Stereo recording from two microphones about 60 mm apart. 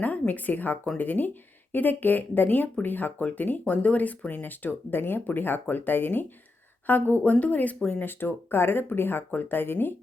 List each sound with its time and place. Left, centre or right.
0.0 s speech: left
8.0 s speech: left